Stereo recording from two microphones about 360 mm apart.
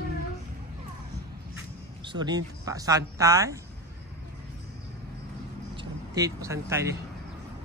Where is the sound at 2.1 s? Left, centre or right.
Centre.